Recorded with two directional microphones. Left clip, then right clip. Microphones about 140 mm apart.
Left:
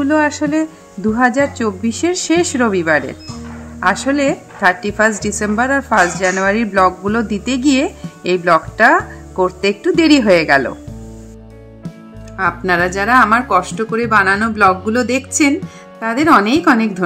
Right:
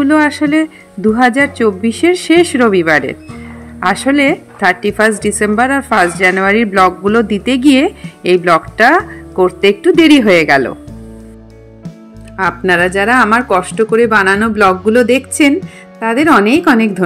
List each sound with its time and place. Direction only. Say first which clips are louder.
0.0 s a woman's voice: right 4 dB; 20° right (ahead or behind)
12.4 s a woman's voice: right 3 dB; 25° right (ahead or behind)